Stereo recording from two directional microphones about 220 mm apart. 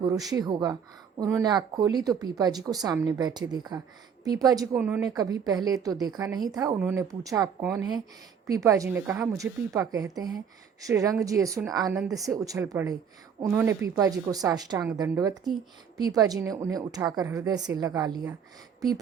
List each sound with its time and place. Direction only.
0.3 s a woman's voice: 20° right (ahead or behind)
4.7 s speech: 5° right (ahead or behind)
5.0 s a woman's voice: 15° right (ahead or behind)